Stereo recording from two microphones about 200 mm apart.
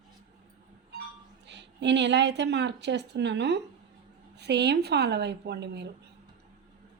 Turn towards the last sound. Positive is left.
turn(degrees=-55)  # may be behind; listen again after turning